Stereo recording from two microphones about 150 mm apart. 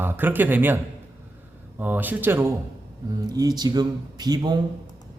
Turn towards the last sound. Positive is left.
turn(degrees=-30)  # may be behind; listen again after turning